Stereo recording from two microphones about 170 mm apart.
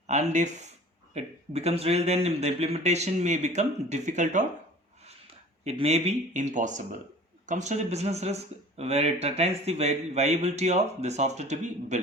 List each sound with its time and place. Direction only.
0.1 s speech: 40° right (ahead or behind)
5.6 s speech: 35° right (ahead or behind)